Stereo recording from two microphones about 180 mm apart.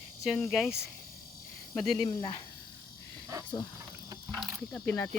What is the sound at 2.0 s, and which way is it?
Speech, 25° left (ahead or behind).